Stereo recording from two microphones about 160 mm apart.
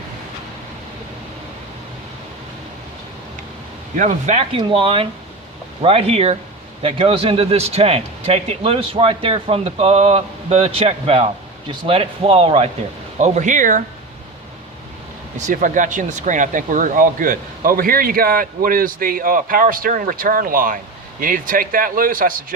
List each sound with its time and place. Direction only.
3.9 s speech: 50° right (ahead or behind)
4.5 s speech: 35° right (ahead or behind); by 13.8 s 55° right (ahead or behind)
15.4 s speech: 50° right (ahead or behind)